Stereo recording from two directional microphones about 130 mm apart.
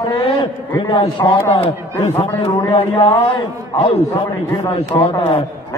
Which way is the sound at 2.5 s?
20° left (ahead or behind).